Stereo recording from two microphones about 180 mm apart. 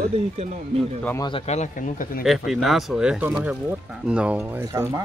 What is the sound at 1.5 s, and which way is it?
Speech, 45° left (ahead or behind).